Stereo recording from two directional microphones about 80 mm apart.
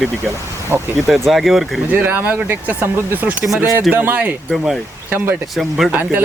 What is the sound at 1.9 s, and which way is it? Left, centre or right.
Speech, right.